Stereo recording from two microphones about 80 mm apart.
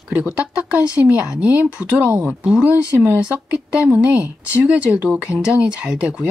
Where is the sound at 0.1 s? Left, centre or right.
Centre.